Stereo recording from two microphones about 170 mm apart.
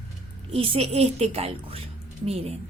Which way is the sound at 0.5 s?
35° right (ahead or behind).